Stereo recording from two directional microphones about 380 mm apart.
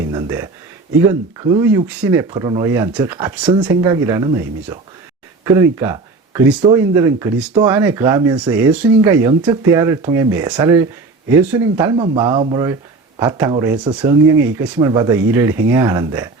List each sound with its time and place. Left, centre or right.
0.1 s speech: centre